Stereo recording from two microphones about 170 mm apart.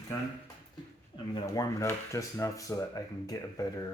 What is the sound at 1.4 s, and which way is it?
Speech, 20° left (ahead or behind).